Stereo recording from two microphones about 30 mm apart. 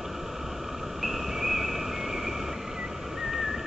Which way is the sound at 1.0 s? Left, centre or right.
Centre.